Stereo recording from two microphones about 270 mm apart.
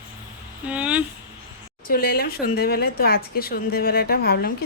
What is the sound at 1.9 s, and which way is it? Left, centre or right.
A woman's voice, left.